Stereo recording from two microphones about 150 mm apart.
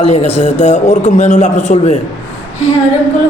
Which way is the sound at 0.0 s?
45° left (ahead or behind).